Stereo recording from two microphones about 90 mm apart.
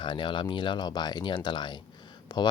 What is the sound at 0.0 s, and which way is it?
Speech, 65° left (ahead or behind).